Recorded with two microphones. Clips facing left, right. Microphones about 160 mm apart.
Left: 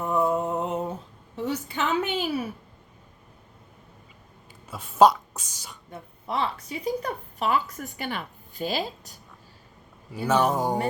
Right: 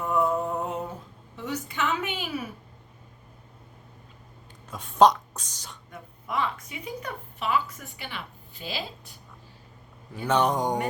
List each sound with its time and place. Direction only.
0.0 s mantra: 20° left (ahead or behind)
1.4 s a sound: 30° left (ahead or behind)
4.7 s speech: 5° left (ahead or behind)
5.9 s a woman's voice: 30° left (ahead or behind)
10.1 s speech: 5° left (ahead or behind)